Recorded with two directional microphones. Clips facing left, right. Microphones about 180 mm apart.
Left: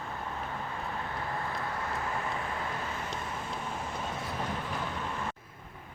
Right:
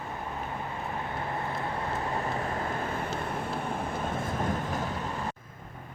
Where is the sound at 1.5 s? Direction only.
25° right (ahead or behind); by 4.8 s 50° right (ahead or behind).